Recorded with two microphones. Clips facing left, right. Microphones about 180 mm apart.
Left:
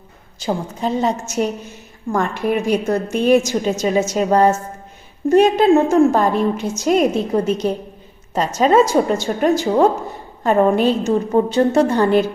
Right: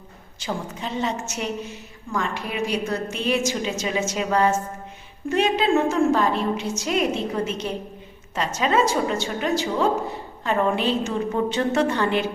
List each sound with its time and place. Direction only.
0.4 s a woman's voice: 40° left (ahead or behind)